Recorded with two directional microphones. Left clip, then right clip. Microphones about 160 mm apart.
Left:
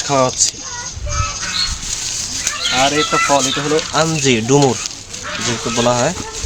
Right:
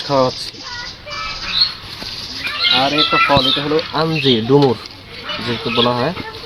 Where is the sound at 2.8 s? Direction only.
20° left (ahead or behind).